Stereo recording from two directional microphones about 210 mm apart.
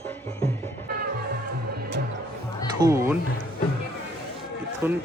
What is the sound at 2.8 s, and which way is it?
Speech, 15° right (ahead or behind).